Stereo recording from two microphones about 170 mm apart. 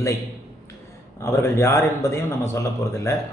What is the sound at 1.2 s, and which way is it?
Speech, 15° left (ahead or behind).